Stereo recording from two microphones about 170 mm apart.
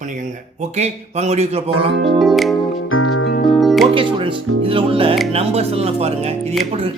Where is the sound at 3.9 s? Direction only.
30° right (ahead or behind).